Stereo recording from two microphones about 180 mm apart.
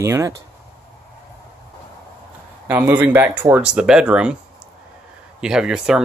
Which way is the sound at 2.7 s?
10° right (ahead or behind).